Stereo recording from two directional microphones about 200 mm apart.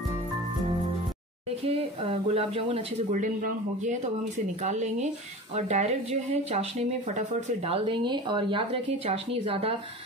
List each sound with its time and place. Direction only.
1.6 s speech: 30° right (ahead or behind)